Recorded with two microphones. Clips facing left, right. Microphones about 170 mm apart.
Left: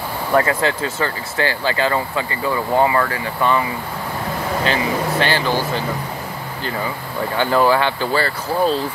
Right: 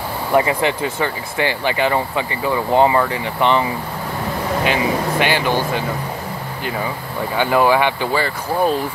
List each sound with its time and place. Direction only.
0.3 s speech: 15° right (ahead or behind)
5.2 s speech: 15° right (ahead or behind)
7.3 s speech: 15° right (ahead or behind)